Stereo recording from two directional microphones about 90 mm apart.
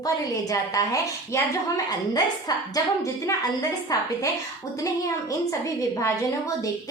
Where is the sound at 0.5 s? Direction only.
40° left (ahead or behind).